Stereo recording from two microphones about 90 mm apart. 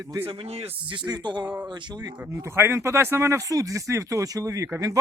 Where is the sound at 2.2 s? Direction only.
30° right (ahead or behind).